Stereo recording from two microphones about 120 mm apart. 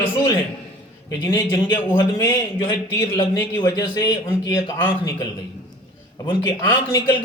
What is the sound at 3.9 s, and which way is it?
Speech, 25° left (ahead or behind).